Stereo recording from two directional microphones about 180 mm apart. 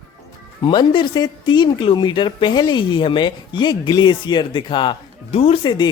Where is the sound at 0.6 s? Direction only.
25° left (ahead or behind).